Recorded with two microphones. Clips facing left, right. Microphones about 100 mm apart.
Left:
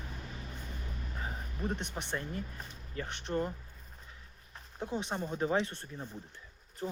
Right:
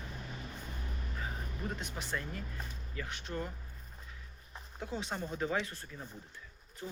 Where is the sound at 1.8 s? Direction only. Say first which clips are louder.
Left 2 dB; 30° left (ahead or behind).